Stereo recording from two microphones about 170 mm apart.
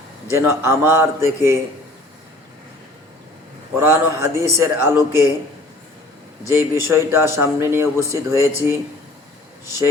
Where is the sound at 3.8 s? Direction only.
15° right (ahead or behind).